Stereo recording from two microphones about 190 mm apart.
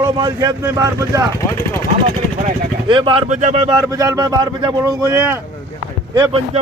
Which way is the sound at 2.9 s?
25° right (ahead or behind).